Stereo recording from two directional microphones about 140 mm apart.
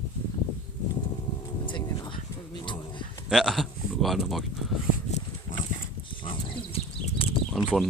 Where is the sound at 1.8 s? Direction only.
25° left (ahead or behind).